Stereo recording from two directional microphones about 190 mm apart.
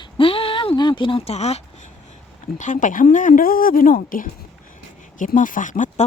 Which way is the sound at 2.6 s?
40° left (ahead or behind).